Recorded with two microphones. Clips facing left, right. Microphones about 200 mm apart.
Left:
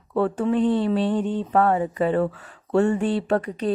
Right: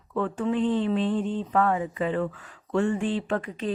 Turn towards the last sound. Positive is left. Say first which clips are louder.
# left 5 dB
turn(degrees=40)  # may be behind; listen again after turning